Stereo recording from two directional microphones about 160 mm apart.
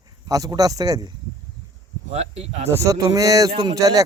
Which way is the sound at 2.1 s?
40° right (ahead or behind).